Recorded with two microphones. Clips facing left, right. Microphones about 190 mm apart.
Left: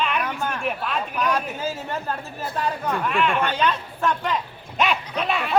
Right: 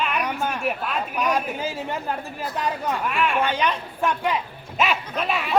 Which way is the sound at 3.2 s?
10° right (ahead or behind).